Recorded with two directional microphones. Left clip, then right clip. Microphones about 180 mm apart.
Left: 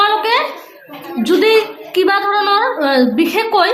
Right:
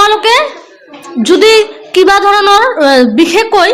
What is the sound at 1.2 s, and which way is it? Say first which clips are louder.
A woman's voice: right 6 dB; 45° right (ahead or behind).